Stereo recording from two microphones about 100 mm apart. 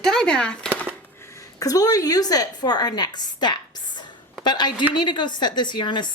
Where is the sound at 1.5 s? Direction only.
40° left (ahead or behind).